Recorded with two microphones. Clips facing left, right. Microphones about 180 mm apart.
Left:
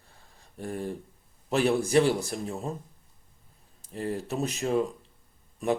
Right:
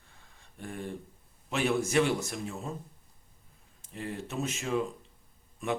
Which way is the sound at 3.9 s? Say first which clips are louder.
Left 6 dB; 40° left (ahead or behind).